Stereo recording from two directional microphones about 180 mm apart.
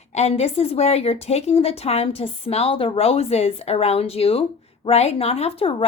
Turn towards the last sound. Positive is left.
turn(degrees=30)  # may be behind; listen again after turning